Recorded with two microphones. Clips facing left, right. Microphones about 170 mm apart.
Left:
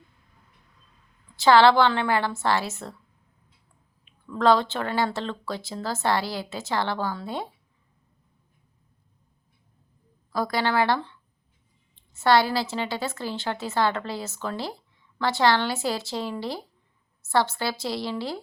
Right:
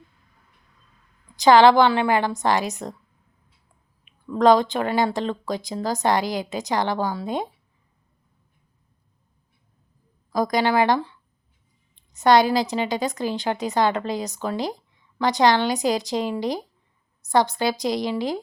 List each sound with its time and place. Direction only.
1.4 s a woman's voice: 15° right (ahead or behind)
4.0 s a woman's voice: 15° right (ahead or behind)
10.3 s a woman's voice: 15° right (ahead or behind)